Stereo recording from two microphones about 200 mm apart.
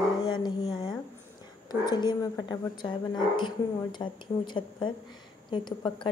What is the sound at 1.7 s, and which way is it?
A woman's voice, 20° left (ahead or behind).